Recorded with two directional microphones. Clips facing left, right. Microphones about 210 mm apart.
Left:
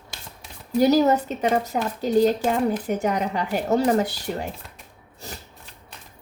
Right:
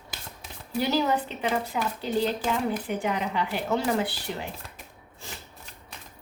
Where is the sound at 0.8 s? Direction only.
40° left (ahead or behind).